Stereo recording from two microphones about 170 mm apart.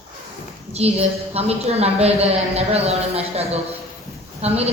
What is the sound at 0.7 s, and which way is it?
A woman's voice, 35° right (ahead or behind).